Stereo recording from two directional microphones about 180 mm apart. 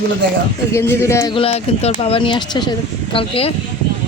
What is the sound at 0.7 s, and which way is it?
Speech, 15° left (ahead or behind).